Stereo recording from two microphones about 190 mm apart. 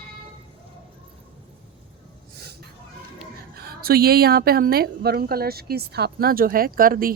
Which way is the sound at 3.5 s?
55° right (ahead or behind).